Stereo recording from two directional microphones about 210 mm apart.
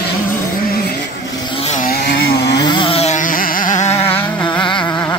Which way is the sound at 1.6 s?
35° left (ahead or behind).